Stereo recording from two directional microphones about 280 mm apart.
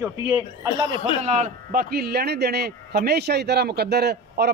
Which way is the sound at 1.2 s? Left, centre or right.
Right.